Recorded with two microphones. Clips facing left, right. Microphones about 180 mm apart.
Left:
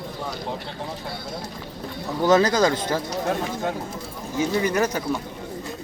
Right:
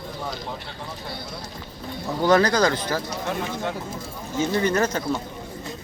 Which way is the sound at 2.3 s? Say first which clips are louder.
Left 1 dB; 20° left (ahead or behind).